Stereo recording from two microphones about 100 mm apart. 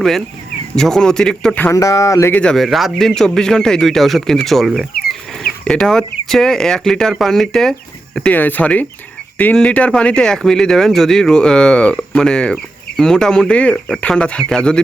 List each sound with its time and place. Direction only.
0.8 s a man's voice: 5° left (ahead or behind)
1.7 s speech: 35° left (ahead or behind)
2.3 s a man's voice: 10° left (ahead or behind)
8.3 s speech: 15° left (ahead or behind)